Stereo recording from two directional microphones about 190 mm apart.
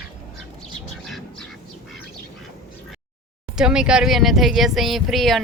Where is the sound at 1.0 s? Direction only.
Centre (ahead or behind).